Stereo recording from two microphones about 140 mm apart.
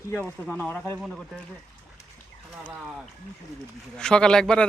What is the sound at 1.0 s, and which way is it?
Speech, centre (ahead or behind).